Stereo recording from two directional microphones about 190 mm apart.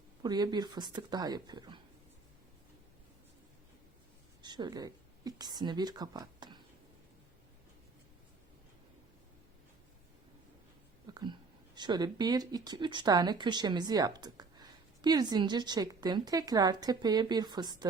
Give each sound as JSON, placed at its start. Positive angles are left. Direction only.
{"t": 0.2, "sound": "speech", "side_deg": -20}
{"t": 4.4, "sound": "speech", "side_deg": -25}
{"t": 11.0, "sound": "speech", "side_deg": -20}